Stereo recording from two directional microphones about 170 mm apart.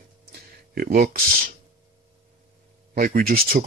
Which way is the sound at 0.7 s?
65° right (ahead or behind).